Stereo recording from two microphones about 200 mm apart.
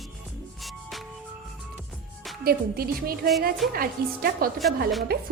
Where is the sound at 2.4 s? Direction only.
50° right (ahead or behind).